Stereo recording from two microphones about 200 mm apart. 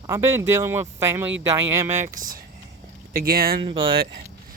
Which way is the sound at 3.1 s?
50° right (ahead or behind).